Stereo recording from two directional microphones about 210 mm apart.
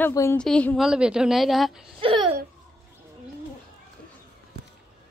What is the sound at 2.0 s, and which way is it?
Speech, 25° right (ahead or behind).